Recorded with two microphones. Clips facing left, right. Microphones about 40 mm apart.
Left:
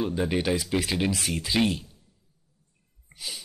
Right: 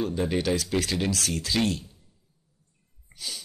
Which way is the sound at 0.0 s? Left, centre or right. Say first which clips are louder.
Even; centre.